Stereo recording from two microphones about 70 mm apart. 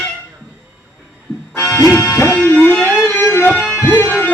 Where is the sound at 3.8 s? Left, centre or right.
Left.